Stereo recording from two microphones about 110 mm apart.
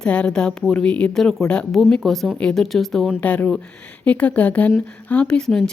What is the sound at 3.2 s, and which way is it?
A woman's voice, 15° left (ahead or behind).